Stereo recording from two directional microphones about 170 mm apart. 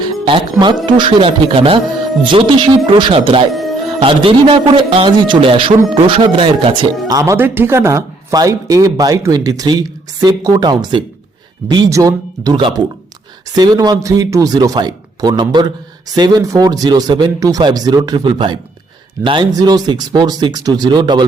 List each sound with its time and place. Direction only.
0.0 s speech: 30° right (ahead or behind)
2.8 s a man's voice: 30° right (ahead or behind)
3.5 s music: centre (ahead or behind)
4.0 s a man's voice: 30° right (ahead or behind)
7.1 s speech: 20° right (ahead or behind)